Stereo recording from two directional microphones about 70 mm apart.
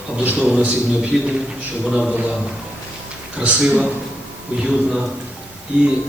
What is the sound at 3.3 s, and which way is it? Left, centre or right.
Speech, centre.